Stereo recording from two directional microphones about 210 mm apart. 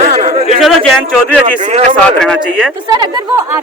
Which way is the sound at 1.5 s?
35° right (ahead or behind).